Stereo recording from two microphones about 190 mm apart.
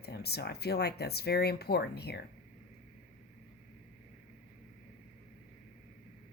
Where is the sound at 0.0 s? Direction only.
60° left (ahead or behind).